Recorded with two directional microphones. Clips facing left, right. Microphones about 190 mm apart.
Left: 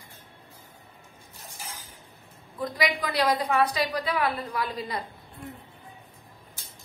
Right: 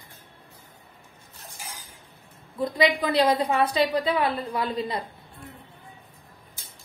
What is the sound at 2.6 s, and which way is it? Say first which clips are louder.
A woman's voice: right 5 dB; 25° right (ahead or behind).